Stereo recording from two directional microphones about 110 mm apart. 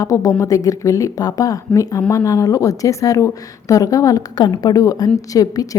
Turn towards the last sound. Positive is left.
turn(degrees=35)  # may be behind; listen again after turning